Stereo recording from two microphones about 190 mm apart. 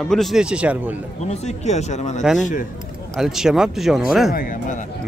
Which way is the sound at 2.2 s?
Centre (ahead or behind).